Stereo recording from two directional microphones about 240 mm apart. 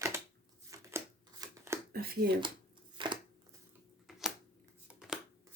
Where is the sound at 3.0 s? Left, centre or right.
Right.